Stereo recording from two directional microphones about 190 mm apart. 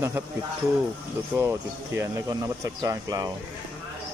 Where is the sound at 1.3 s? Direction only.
15° right (ahead or behind).